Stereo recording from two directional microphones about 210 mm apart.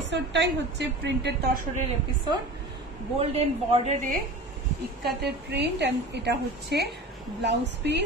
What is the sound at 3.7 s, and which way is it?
Speech, 35° right (ahead or behind).